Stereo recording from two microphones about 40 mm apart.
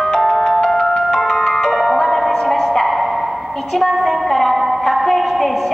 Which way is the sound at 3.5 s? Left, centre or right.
Centre.